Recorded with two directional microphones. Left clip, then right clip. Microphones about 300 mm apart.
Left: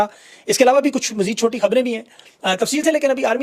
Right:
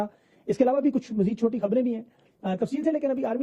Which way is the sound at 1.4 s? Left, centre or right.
Centre.